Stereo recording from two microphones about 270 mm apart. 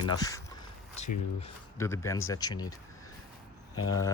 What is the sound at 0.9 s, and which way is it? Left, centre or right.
Speech, left.